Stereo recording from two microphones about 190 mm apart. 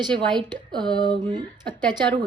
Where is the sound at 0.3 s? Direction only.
25° right (ahead or behind).